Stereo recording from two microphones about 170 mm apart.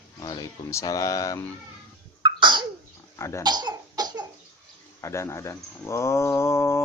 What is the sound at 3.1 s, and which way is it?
Speech, 15° left (ahead or behind).